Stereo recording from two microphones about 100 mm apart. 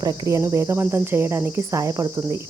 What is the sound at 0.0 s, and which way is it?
Cricket, 35° right (ahead or behind).